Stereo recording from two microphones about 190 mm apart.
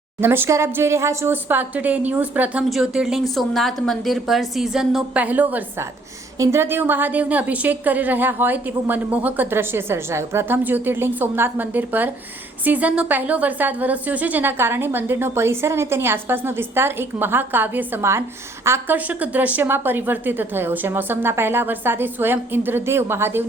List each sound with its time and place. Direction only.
0.2 s a woman's voice: 10° right (ahead or behind)